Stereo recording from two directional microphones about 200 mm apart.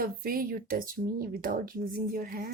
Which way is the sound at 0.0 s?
45° right (ahead or behind).